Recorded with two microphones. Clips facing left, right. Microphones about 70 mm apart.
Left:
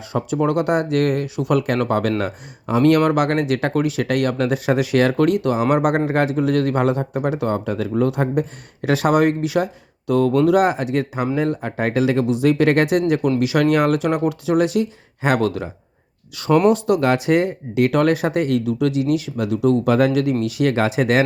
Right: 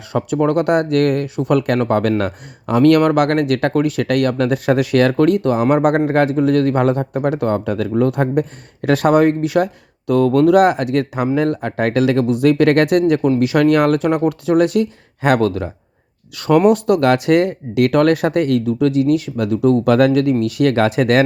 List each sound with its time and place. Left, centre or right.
0.1 s speech: right
2.6 s speech: right
13.4 s speech: right
16.7 s speech: right
19.8 s speech: right